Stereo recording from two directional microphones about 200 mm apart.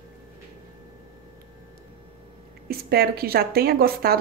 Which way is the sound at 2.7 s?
50° right (ahead or behind).